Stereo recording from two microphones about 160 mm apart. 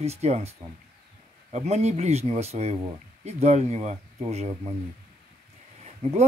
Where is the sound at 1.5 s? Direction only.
45° right (ahead or behind).